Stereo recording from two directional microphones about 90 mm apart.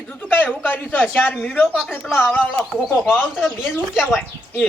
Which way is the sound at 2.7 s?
10° right (ahead or behind).